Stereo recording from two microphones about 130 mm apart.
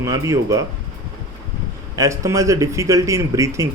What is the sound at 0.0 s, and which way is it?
Speech, 25° right (ahead or behind).